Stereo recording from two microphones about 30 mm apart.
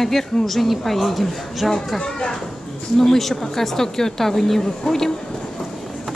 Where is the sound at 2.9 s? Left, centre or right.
Centre.